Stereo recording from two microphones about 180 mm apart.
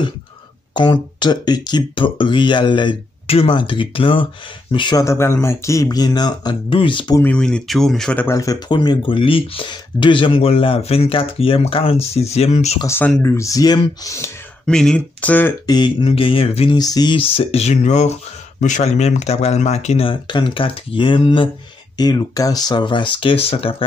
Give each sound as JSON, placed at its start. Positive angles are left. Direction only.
{"t": 0.7, "sound": "speech", "side_deg": 25}
{"t": 7.2, "sound": "speech", "side_deg": 5}
{"t": 12.8, "sound": "speech", "side_deg": 15}
{"t": 14.7, "sound": "speech", "side_deg": 5}
{"t": 15.6, "sound": "speech", "side_deg": 25}